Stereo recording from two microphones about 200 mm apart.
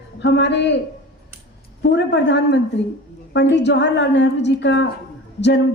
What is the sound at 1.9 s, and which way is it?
A woman's voice, 60° left (ahead or behind).